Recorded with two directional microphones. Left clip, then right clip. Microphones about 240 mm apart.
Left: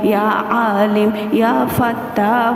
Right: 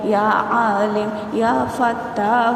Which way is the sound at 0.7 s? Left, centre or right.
Left.